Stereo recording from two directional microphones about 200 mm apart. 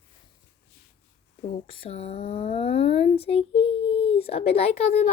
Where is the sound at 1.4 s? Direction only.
30° left (ahead or behind).